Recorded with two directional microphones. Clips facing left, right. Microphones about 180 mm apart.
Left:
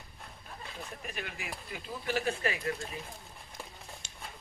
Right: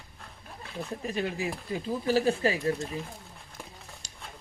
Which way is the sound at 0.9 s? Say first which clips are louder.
Right 13 dB; 30° right (ahead or behind).